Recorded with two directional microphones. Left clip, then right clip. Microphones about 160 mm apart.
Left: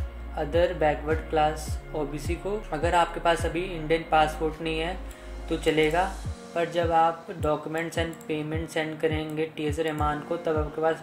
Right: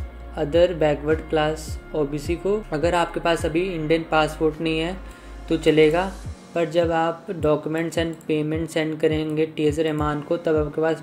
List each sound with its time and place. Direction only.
0.4 s speech: 30° right (ahead or behind)